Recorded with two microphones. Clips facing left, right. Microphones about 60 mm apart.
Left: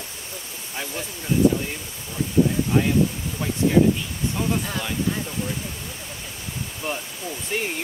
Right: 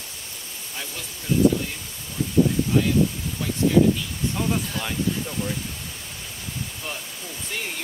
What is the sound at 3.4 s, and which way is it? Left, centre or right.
Speech, left.